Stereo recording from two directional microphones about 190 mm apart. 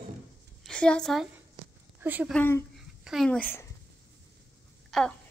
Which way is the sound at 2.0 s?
10° right (ahead or behind).